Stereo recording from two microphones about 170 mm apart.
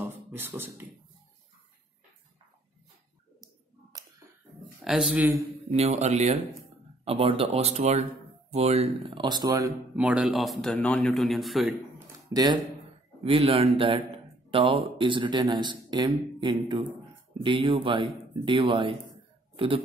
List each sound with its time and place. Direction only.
0.0 s beatboxing: 10° right (ahead or behind)
3.9 s finger snapping: 20° right (ahead or behind)
4.8 s speech: 5° right (ahead or behind)
5.7 s speech: 40° right (ahead or behind); by 9.7 s 25° right (ahead or behind)
9.9 s a man's voice: 5° right (ahead or behind)
12.3 s speech: 25° right (ahead or behind)